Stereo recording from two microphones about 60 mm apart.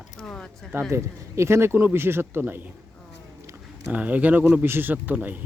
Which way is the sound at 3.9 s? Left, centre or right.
Right.